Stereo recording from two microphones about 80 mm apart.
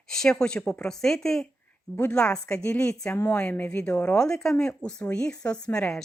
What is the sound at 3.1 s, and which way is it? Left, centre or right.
A woman's voice, left.